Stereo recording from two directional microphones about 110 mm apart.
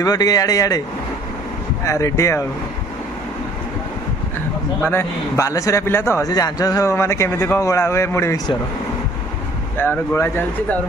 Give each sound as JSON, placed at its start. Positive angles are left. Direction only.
{"t": 0.0, "sound": "speech", "side_deg": 35}
{"t": 1.9, "sound": "speech", "side_deg": 25}
{"t": 4.8, "sound": "speech", "side_deg": 20}
{"t": 6.3, "sound": "speech", "side_deg": 35}
{"t": 9.8, "sound": "speech", "side_deg": 20}